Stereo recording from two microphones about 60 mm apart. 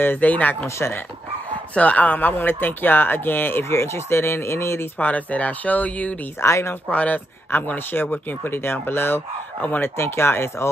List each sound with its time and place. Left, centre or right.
0.0 s speech: left
1.8 s speech: left
3.7 s speech: left
4.9 s speech: left
6.4 s speech: left
6.9 s speech: left
9.9 s speech: left